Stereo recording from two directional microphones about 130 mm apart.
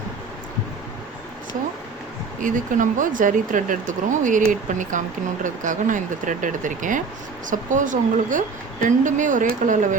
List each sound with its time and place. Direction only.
2.4 s speech: 90° right